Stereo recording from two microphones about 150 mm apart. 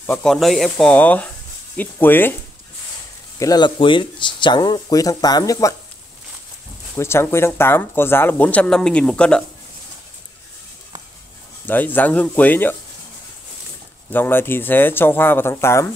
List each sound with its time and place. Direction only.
0.0 s speech: 5° left (ahead or behind)
3.3 s speech: 25° left (ahead or behind)
7.0 s speech: 15° left (ahead or behind)
11.6 s speech: 10° left (ahead or behind)
14.1 s speech: 15° left (ahead or behind)